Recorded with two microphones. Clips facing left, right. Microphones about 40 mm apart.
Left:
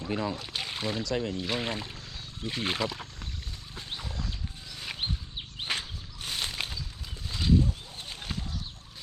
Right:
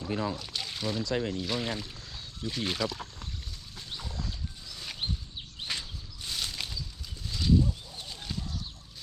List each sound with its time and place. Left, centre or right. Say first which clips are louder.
0.1 s speech: left 1 dB; left
0.4 s speech: left 1 dB; left
2.1 s wild animals: even; left
6.2 s a sound: left 2 dB; left
7.3 s horse: even; left
7.9 s a sound: left 2 dB; left